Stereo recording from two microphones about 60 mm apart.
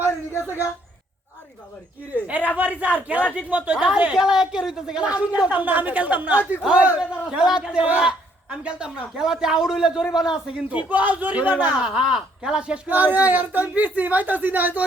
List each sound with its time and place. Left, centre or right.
0.3 s a sound: right
2.2 s a man's voice: right
6.6 s a man's voice: centre
10.7 s speech: right
11.9 s a man's voice: centre
12.9 s speech: right